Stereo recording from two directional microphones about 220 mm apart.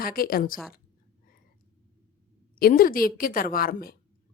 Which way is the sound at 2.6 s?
40° left (ahead or behind).